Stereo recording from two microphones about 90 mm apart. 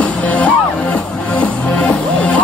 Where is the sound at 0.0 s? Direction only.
15° left (ahead or behind).